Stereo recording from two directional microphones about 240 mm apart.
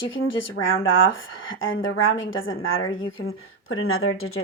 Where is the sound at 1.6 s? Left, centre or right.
Left.